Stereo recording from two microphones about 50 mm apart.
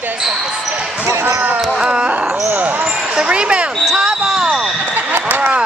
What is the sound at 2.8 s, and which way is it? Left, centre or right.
Basketball bounce, right.